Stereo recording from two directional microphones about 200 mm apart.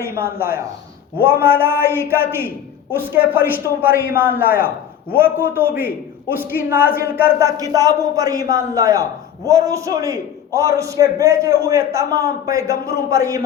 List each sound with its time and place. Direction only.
0.0 s a man's voice: 10° right (ahead or behind)